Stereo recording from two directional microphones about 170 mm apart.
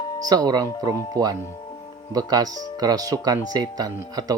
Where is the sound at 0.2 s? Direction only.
20° right (ahead or behind).